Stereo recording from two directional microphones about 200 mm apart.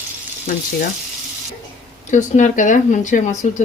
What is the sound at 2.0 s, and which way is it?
Speech, 35° left (ahead or behind).